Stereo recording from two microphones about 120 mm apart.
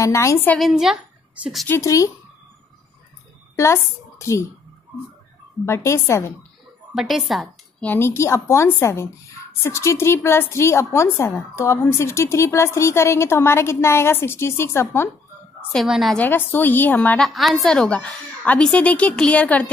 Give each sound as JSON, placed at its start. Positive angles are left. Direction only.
{"t": 0.0, "sound": "a woman's voice", "side_deg": 25}
{"t": 0.6, "sound": "a woman's voice", "side_deg": -5}
{"t": 1.7, "sound": "a woman's voice", "side_deg": 25}
{"t": 3.5, "sound": "speech", "side_deg": 25}
{"t": 5.7, "sound": "a woman's voice", "side_deg": 20}
{"t": 6.9, "sound": "a woman's voice", "side_deg": 0}
{"t": 7.8, "sound": "a woman's voice", "side_deg": 15}
{"t": 15.7, "sound": "a woman's voice", "side_deg": 0}
{"t": 16.2, "sound": "a woman's voice", "side_deg": 15}
{"t": 17.2, "sound": "a woman's voice", "side_deg": 0}